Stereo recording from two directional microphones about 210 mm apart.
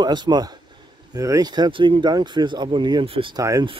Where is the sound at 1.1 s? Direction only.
15° right (ahead or behind).